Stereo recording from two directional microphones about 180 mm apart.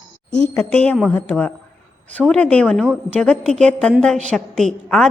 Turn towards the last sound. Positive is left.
turn(degrees=0)  # may be behind; listen again after turning